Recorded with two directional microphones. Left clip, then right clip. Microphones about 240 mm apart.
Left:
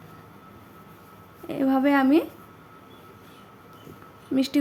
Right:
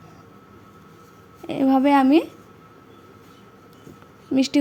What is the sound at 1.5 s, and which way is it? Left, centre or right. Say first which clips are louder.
Speech: right 4 dB; centre.